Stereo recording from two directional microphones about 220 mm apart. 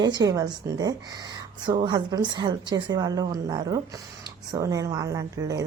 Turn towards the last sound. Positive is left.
turn(degrees=-15)  # may be behind; listen again after turning